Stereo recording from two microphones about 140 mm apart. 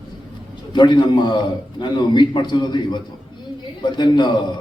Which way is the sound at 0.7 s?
35° left (ahead or behind).